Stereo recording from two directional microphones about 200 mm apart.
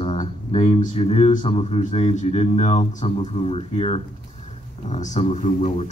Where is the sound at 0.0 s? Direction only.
30° left (ahead or behind).